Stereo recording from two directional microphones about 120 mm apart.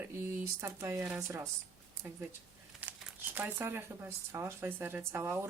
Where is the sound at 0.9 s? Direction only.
15° right (ahead or behind).